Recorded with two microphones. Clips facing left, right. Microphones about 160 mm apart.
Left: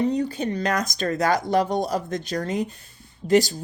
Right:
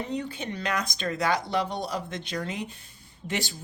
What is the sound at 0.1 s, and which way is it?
Speech, 40° left (ahead or behind).